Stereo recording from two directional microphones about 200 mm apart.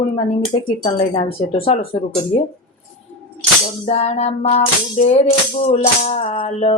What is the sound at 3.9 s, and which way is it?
Music, 30° left (ahead or behind).